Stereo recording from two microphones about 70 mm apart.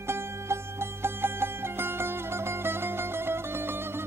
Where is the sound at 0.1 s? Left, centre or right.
Right.